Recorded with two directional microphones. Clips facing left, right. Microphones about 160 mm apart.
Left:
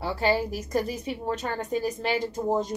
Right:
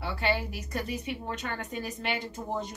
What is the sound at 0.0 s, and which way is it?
A woman's voice, 40° left (ahead or behind).